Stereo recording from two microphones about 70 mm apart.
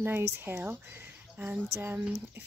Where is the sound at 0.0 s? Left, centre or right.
Right.